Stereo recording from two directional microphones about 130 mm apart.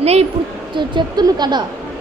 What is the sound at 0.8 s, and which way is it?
Speech, 35° right (ahead or behind).